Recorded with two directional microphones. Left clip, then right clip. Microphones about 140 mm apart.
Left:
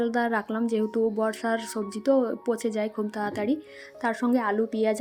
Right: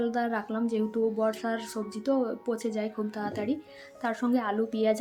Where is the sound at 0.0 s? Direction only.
45° left (ahead or behind).